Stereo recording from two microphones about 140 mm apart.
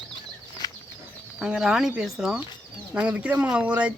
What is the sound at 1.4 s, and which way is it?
Speech, 5° right (ahead or behind).